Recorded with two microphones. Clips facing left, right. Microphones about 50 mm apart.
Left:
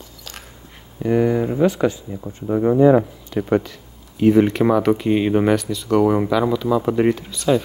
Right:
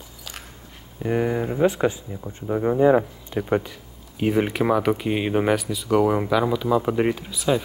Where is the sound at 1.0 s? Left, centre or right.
Centre.